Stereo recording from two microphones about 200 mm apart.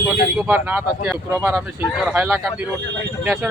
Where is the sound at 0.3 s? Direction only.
10° right (ahead or behind).